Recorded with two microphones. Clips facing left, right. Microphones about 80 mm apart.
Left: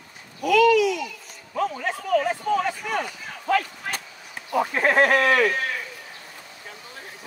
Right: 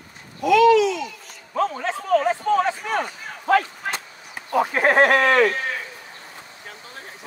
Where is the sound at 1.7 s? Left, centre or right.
Right.